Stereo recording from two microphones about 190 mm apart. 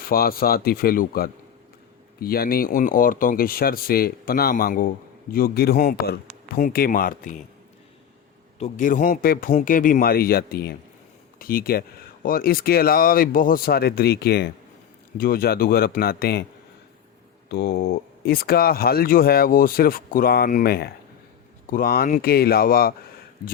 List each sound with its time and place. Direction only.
0.0 s speech: 50° left (ahead or behind)
8.5 s speech: 35° left (ahead or behind); by 16.5 s 55° left (ahead or behind)
17.5 s speech: 60° left (ahead or behind)